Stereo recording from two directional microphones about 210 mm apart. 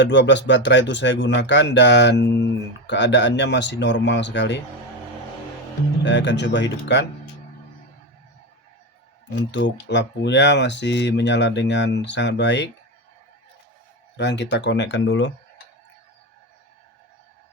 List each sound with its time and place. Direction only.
0.0 s speech: 60° left (ahead or behind)
6.1 s speech: 55° left (ahead or behind)
9.3 s speech: 55° left (ahead or behind)
14.2 s speech: 55° left (ahead or behind)